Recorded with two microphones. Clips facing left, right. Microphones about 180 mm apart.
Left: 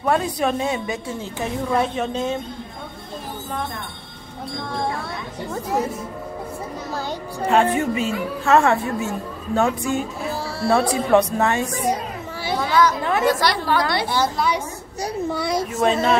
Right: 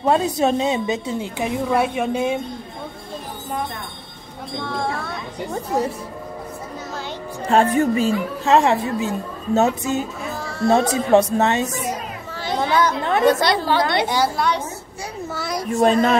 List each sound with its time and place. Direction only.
0.0 s a woman's voice: 25° right (ahead or behind)
7.4 s speech: 35° right (ahead or behind)
8.5 s a woman's voice: 20° right (ahead or behind)
10.3 s music: 35° left (ahead or behind)
10.7 s a woman's voice: 25° right (ahead or behind)
12.5 s a sound: 25° right (ahead or behind)
13.0 s a woman's voice: 25° right (ahead or behind)
14.3 s a woman's voice: 5° left (ahead or behind)
15.8 s speech: 45° right (ahead or behind)